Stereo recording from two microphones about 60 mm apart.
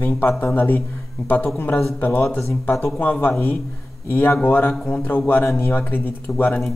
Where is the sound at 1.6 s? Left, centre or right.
Left.